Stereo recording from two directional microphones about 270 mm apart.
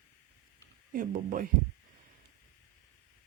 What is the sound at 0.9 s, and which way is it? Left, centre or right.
Speech, right.